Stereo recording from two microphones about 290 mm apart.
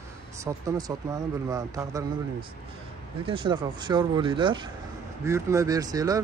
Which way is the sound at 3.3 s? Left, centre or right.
Centre.